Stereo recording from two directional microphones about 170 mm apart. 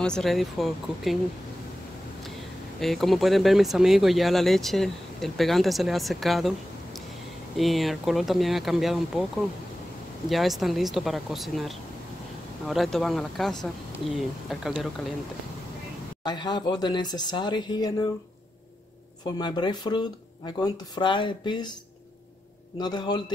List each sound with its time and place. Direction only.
0.0 s speech: 5° left (ahead or behind)
2.8 s speech: centre (ahead or behind)
7.5 s speech: centre (ahead or behind)
10.3 s speech: centre (ahead or behind)
16.3 s speech: 25° left (ahead or behind)
19.2 s speech: 25° left (ahead or behind)
22.8 s speech: 25° left (ahead or behind)